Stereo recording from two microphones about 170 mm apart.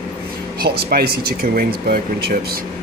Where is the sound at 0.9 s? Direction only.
65° right (ahead or behind).